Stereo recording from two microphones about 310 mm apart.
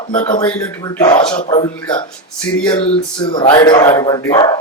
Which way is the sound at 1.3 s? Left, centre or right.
Centre.